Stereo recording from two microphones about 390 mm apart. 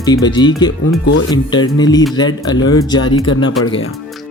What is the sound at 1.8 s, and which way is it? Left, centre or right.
Speech, centre.